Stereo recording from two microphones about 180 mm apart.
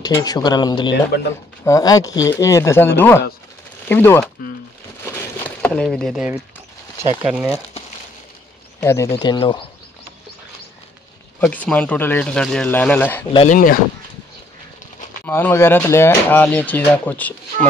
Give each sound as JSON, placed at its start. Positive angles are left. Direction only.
{"t": 0.0, "sound": "speech", "side_deg": 20}
{"t": 5.6, "sound": "speech", "side_deg": 5}
{"t": 7.0, "sound": "speech", "side_deg": -15}
{"t": 8.8, "sound": "speech", "side_deg": 15}
{"t": 11.3, "sound": "speech", "side_deg": 10}
{"t": 13.5, "sound": "speech", "side_deg": 50}
{"t": 15.2, "sound": "speech", "side_deg": 10}